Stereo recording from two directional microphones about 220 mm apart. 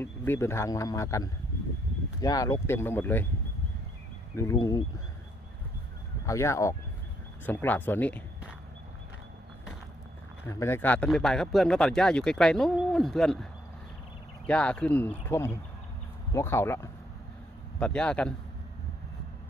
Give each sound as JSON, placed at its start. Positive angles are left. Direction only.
{"t": 0.0, "sound": "a man's voice", "side_deg": 10}
{"t": 4.4, "sound": "a man's voice", "side_deg": 15}
{"t": 6.2, "sound": "a man's voice", "side_deg": 15}
{"t": 10.4, "sound": "a man's voice", "side_deg": 10}